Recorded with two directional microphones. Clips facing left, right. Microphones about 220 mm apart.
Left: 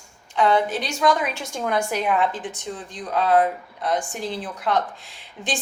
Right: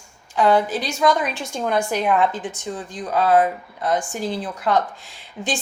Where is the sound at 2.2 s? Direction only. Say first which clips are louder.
Right 3 dB; centre (ahead or behind).